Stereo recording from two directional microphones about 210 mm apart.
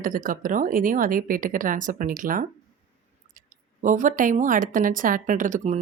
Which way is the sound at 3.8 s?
35° right (ahead or behind).